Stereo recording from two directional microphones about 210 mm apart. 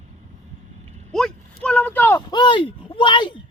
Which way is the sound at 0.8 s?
30° right (ahead or behind).